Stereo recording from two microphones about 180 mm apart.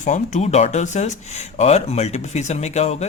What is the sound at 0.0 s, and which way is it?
Speech, 40° left (ahead or behind).